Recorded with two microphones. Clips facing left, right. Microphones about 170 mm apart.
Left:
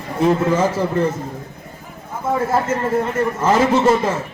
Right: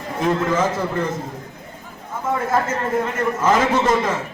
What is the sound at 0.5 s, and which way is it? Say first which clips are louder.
Speech: left 3 dB; 10° left (ahead or behind).